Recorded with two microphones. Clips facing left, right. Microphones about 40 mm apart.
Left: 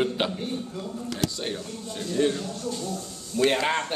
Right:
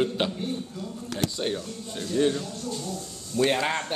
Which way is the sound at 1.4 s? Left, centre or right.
Centre.